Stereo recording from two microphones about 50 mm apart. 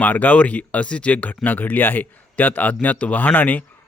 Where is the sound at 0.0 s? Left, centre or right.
Left.